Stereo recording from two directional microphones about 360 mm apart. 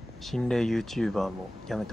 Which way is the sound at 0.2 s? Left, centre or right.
Centre.